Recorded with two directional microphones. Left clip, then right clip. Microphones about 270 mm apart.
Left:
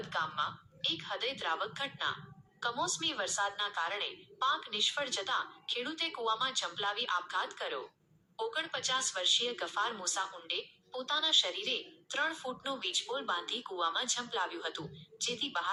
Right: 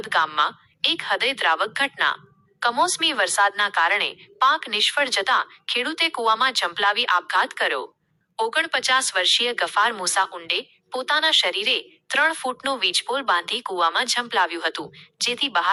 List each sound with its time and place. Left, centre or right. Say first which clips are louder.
0.0 s speech: right 14 dB; right